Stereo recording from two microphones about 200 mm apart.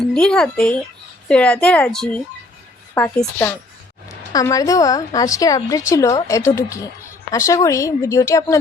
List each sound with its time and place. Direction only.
0.0 s a woman's voice: 5° left (ahead or behind)